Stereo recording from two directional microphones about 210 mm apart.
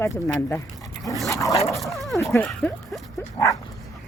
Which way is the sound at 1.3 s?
15° left (ahead or behind).